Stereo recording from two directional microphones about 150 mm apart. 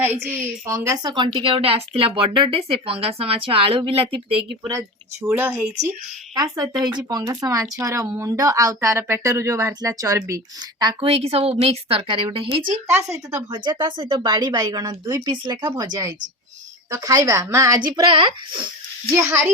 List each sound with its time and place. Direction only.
0.0 s a woman's voice: 15° right (ahead or behind)
1.1 s speech: 30° right (ahead or behind)
5.2 s speech: 10° right (ahead or behind)
6.3 s speech: 25° right (ahead or behind)
11.1 s speech: 40° right (ahead or behind)
12.9 s speech: 20° right (ahead or behind)
19.1 s speech: 15° right (ahead or behind)